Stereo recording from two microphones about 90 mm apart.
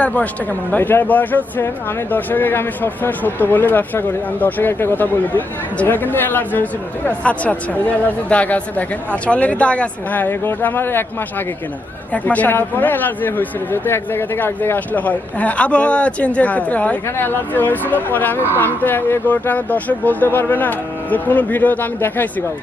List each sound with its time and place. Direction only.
0.0 s speech: 15° left (ahead or behind)